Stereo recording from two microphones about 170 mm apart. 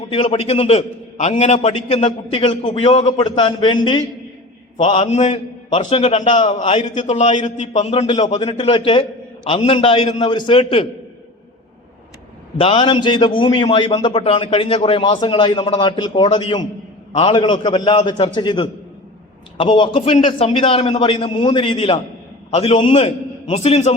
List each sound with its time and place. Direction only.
0.1 s a man's voice: 35° left (ahead or behind)
12.5 s a man's voice: 35° left (ahead or behind)
20.1 s a man's voice: 45° left (ahead or behind)
20.5 s a man's voice: 30° left (ahead or behind)